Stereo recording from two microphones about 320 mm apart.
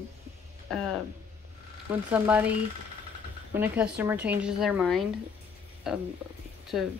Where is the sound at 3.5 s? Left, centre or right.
Centre.